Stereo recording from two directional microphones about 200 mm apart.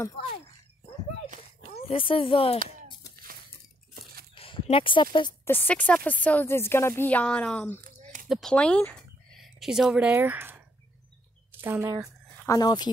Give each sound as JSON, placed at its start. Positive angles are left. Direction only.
{"t": 1.7, "sound": "speech", "side_deg": 30}
{"t": 3.9, "sound": "a sound", "side_deg": -50}
{"t": 4.4, "sound": "speech", "side_deg": 30}
{"t": 5.5, "sound": "speech", "side_deg": 10}
{"t": 8.0, "sound": "a sound", "side_deg": -35}
{"t": 8.3, "sound": "speech", "side_deg": 0}
{"t": 11.6, "sound": "speech", "side_deg": -15}
{"t": 12.4, "sound": "speech", "side_deg": 20}